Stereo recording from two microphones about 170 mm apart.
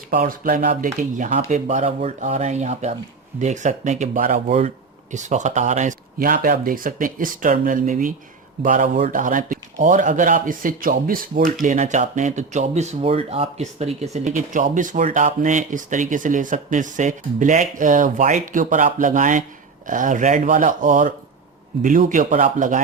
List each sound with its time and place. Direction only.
0.1 s speech: 55° right (ahead or behind)